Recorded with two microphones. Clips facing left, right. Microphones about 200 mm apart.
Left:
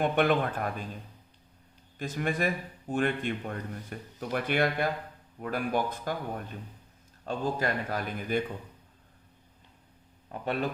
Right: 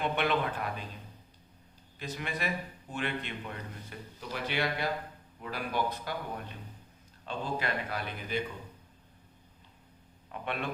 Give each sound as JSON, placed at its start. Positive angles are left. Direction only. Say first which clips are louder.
{"t": 0.0, "sound": "speech", "louder": "left 5 dB", "side_deg": 50}
{"t": 2.0, "sound": "speech", "louder": "left 7 dB", "side_deg": 50}
{"t": 10.4, "sound": "speech", "louder": "left 6 dB", "side_deg": 40}